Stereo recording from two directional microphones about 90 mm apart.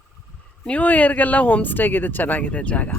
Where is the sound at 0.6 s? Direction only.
15° left (ahead or behind).